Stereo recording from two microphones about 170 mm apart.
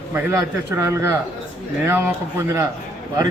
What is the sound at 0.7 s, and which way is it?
Speech, 15° right (ahead or behind).